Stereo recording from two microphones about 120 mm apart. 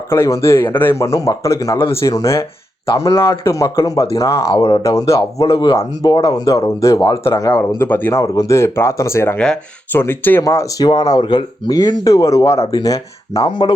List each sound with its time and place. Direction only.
0.1 s speech: 25° left (ahead or behind)
8.2 s speech: 30° left (ahead or behind)
11.8 s speech: 30° left (ahead or behind)